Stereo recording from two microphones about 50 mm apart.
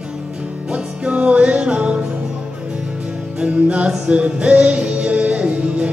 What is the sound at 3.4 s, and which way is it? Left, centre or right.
Music, right.